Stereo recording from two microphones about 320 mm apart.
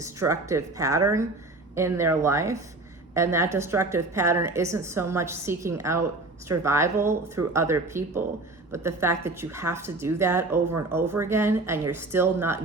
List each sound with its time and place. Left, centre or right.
0.0 s a woman's voice: centre